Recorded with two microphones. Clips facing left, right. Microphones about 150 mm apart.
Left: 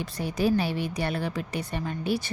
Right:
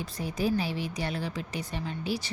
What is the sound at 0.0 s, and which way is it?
Speech, 70° left (ahead or behind).